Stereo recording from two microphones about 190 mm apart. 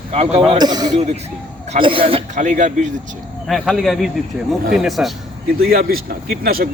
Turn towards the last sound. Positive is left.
turn(degrees=-50)  # may be behind; listen again after turning